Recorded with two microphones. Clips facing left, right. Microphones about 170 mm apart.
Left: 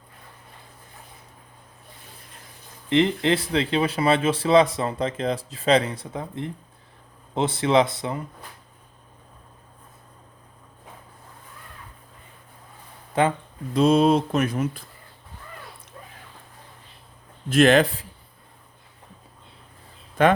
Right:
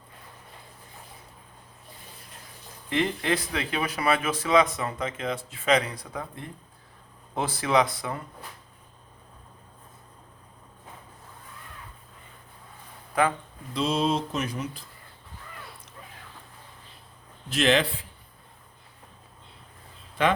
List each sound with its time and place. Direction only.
2.9 s a man's voice: 25° left (ahead or behind)
13.7 s speech: 55° left (ahead or behind)
17.5 s speech: 50° left (ahead or behind)
20.2 s speech: 50° left (ahead or behind)